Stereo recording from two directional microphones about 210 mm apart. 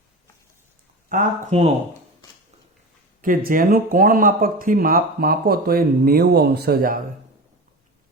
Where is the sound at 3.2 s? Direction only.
40° right (ahead or behind).